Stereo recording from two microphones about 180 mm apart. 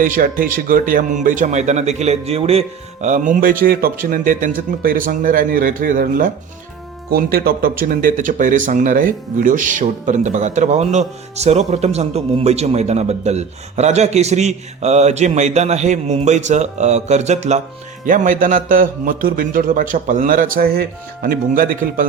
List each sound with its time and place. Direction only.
0.0 s speech: 50° right (ahead or behind)